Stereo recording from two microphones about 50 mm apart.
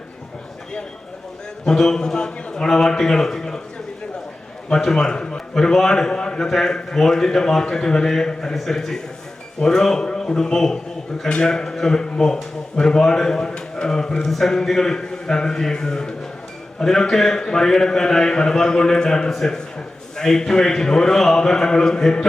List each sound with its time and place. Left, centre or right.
1.6 s a man's voice: centre
4.8 s a man's voice: centre